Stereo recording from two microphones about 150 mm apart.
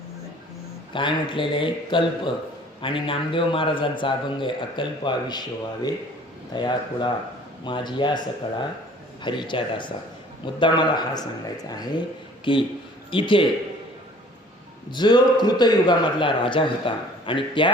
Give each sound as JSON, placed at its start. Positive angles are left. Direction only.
{"t": 0.9, "sound": "a man's voice", "side_deg": 35}
{"t": 9.2, "sound": "a man's voice", "side_deg": 30}
{"t": 14.8, "sound": "a man's voice", "side_deg": 30}